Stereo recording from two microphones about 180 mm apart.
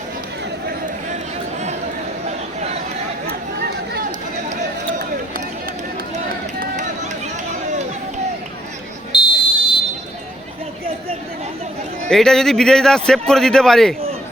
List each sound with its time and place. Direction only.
2.2 s a sound: 40° right (ahead or behind)
6.6 s run: 45° right (ahead or behind)
9.1 s buzzer: 30° left (ahead or behind)
12.0 s a man's voice: 5° left (ahead or behind)